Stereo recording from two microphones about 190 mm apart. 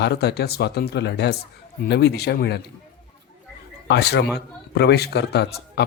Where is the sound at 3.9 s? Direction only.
60° left (ahead or behind).